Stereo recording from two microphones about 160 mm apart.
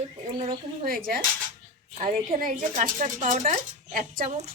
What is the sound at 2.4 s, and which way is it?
Speech, 55° right (ahead or behind).